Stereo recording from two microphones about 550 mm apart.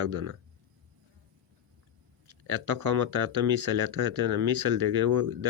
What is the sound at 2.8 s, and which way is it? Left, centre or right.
Speech, right.